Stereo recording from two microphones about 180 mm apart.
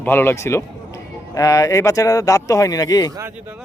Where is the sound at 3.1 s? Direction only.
15° right (ahead or behind).